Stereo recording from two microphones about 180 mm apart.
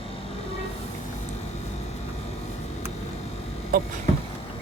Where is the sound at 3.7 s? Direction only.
55° right (ahead or behind).